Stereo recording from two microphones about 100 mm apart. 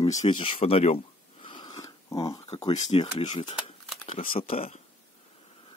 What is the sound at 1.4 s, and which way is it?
Snoring, 50° left (ahead or behind).